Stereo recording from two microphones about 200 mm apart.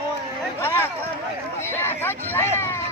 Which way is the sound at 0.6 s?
10° left (ahead or behind).